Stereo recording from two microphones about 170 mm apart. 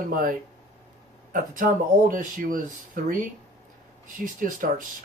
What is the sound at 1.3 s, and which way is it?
Speech, 55° right (ahead or behind).